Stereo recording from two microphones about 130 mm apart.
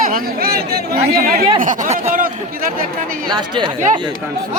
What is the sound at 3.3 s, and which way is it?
Speech, 35° right (ahead or behind).